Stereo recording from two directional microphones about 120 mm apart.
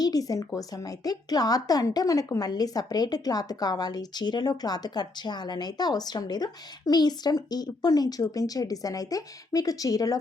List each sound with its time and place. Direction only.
0.0 s a woman's voice: 30° left (ahead or behind)